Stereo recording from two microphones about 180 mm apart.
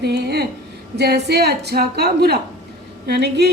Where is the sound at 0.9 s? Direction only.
65° right (ahead or behind).